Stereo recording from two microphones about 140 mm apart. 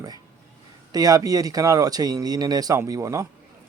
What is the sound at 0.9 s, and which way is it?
Speech, 25° right (ahead or behind).